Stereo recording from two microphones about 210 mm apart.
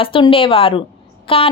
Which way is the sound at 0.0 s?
25° left (ahead or behind).